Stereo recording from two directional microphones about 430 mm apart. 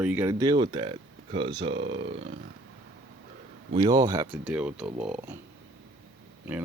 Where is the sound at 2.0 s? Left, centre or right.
Right.